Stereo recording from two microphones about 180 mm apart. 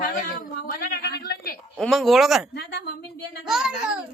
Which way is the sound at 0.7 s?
55° left (ahead or behind).